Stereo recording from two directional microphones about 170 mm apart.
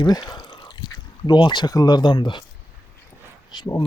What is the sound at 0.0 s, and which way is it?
Drip, 25° left (ahead or behind).